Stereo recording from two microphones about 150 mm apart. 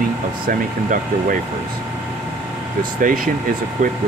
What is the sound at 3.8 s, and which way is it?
Speech, 60° right (ahead or behind).